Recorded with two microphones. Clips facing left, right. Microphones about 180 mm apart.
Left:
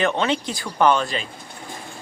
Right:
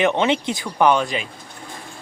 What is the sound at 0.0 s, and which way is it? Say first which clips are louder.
A man's voice: right 3 dB; 20° right (ahead or behind).